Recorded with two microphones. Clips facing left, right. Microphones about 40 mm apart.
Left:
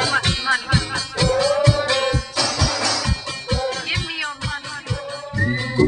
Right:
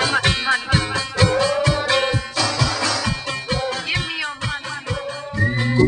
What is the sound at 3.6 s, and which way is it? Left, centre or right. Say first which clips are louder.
Music: right 1 dB; centre.